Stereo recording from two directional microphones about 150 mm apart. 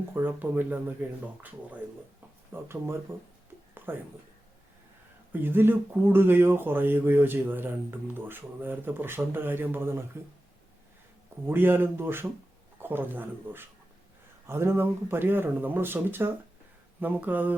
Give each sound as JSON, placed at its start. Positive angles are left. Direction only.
{"t": 0.1, "sound": "speech", "side_deg": -10}
{"t": 5.3, "sound": "speech", "side_deg": -15}
{"t": 11.4, "sound": "speech", "side_deg": -15}